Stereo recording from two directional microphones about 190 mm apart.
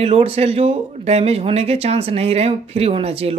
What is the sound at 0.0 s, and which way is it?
Speech, 30° right (ahead or behind).